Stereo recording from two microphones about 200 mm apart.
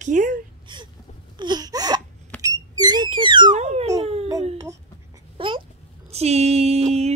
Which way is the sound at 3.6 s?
35° right (ahead or behind).